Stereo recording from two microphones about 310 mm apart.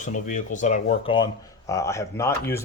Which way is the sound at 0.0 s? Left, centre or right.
Left.